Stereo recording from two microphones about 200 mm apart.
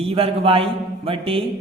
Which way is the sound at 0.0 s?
30° right (ahead or behind).